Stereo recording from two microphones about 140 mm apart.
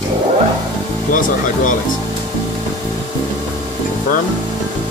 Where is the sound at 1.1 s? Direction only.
70° left (ahead or behind).